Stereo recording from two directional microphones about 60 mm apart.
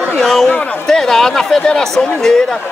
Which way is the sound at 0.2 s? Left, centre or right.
Centre.